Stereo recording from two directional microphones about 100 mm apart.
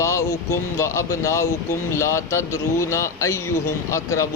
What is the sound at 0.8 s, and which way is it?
Speech, 30° left (ahead or behind).